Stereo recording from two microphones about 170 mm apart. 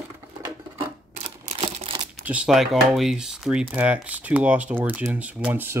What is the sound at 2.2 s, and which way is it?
Speech, 5° right (ahead or behind).